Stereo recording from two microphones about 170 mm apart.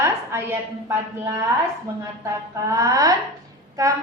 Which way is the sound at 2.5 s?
20° right (ahead or behind).